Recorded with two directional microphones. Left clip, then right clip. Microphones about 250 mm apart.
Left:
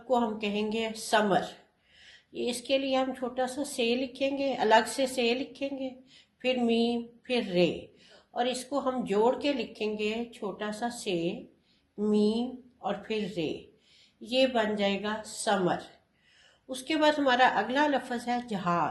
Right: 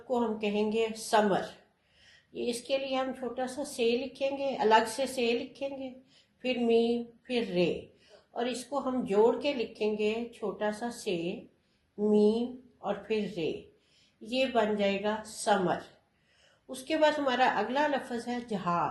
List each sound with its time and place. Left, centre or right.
0.1 s a woman's voice: left